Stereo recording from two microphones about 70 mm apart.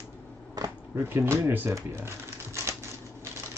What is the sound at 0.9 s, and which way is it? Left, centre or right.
Speech, right.